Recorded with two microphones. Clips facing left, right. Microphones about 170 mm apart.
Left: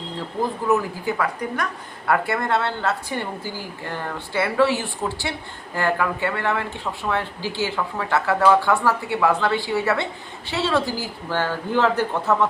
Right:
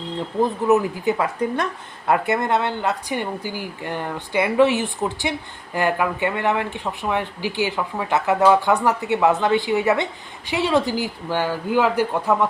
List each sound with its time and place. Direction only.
0.4 s speech: 20° right (ahead or behind)